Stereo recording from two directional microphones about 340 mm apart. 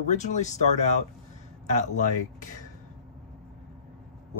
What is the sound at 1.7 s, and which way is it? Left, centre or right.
Speech, left.